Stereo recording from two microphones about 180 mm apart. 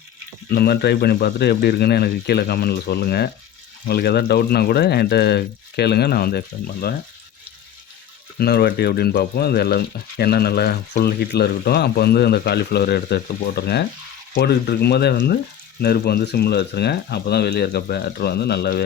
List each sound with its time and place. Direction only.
0.5 s speech: 60° left (ahead or behind)
8.4 s speech: 60° left (ahead or behind)